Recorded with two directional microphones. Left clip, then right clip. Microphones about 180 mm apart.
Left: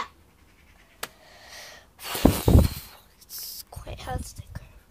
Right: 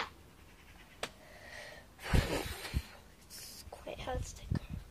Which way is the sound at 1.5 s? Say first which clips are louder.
Left 5 dB; centre (ahead or behind).